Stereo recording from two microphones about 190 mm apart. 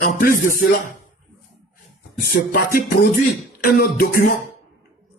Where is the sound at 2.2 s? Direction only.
50° left (ahead or behind).